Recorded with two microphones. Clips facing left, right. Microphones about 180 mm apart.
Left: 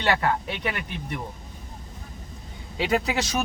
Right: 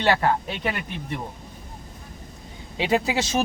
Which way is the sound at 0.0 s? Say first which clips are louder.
Right 3 dB; 30° right (ahead or behind).